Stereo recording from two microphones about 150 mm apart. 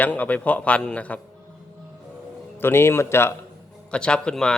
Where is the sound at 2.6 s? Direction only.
15° left (ahead or behind).